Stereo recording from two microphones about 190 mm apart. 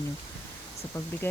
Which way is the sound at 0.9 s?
15° left (ahead or behind).